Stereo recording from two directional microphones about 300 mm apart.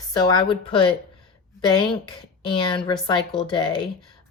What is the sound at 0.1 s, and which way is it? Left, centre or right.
Speech, centre.